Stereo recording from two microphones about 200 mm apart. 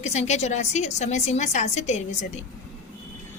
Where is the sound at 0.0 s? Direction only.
35° left (ahead or behind).